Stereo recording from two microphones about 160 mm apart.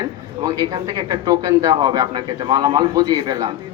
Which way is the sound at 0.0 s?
25° right (ahead or behind).